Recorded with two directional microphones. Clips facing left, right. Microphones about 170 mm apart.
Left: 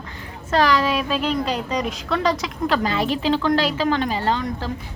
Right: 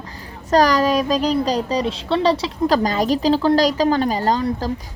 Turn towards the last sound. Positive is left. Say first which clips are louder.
# right 3 dB
turn(degrees=-40)  # may be behind; listen again after turning